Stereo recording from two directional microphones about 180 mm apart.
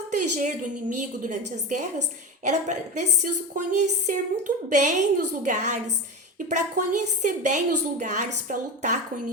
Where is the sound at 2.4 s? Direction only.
40° right (ahead or behind).